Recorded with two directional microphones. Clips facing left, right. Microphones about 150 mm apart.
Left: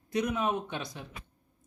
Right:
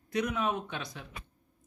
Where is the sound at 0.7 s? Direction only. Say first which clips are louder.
Left 2 dB; 20° left (ahead or behind).